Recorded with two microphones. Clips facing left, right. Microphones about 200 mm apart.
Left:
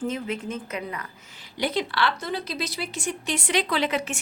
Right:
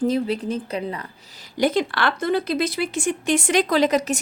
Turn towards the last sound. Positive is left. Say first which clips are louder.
# right 7 dB
turn(degrees=-40)  # may be behind; listen again after turning